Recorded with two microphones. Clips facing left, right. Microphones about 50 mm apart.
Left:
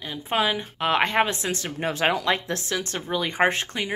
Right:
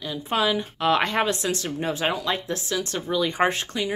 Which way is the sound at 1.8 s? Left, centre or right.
Left.